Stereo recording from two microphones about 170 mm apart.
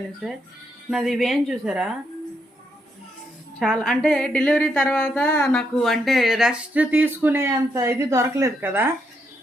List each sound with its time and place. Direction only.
0.9 s a woman's voice: centre (ahead or behind)
3.6 s a woman's voice: centre (ahead or behind)